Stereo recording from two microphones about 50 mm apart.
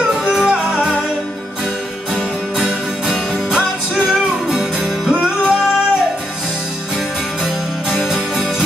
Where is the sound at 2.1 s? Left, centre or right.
Centre.